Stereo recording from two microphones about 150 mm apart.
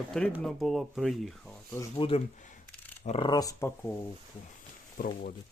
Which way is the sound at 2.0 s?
35° left (ahead or behind).